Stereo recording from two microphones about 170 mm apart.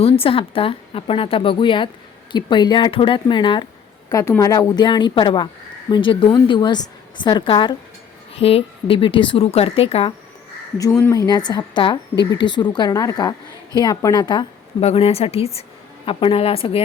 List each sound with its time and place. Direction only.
0.0 s speech: 35° left (ahead or behind)
4.1 s speech: 20° left (ahead or behind); by 10.1 s 35° left (ahead or behind)
10.8 s speech: 20° left (ahead or behind)
14.8 s speech: 35° left (ahead or behind)